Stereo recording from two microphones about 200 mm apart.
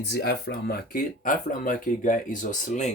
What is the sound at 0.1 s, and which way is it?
Speech, 55° left (ahead or behind).